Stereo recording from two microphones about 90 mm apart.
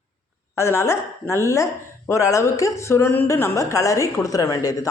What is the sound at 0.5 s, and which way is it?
A woman's voice, 30° left (ahead or behind).